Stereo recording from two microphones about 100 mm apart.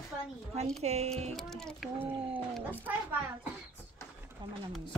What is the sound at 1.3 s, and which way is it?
Speech, 5° left (ahead or behind).